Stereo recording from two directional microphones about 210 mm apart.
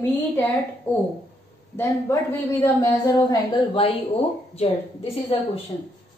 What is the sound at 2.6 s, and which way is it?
A woman's voice, 15° left (ahead or behind).